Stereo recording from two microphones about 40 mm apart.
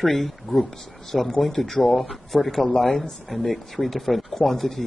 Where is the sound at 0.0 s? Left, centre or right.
Centre.